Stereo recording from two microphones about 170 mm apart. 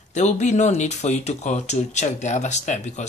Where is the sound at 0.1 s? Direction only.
45° left (ahead or behind).